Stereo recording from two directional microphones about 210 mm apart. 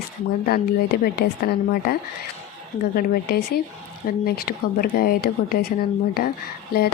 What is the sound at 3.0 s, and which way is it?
Speech, 45° left (ahead or behind).